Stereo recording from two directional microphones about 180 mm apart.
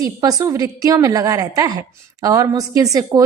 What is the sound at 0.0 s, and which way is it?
A woman's voice, 20° right (ahead or behind).